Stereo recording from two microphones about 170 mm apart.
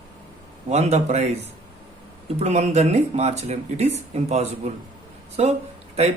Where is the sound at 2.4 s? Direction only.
40° right (ahead or behind).